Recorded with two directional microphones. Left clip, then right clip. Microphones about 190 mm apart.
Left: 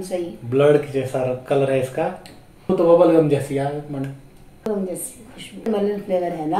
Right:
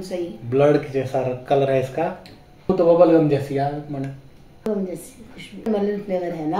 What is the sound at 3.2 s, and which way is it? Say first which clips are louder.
Speech: even; 20° right (ahead or behind).